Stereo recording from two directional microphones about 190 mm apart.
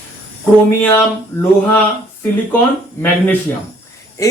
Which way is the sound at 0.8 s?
10° left (ahead or behind).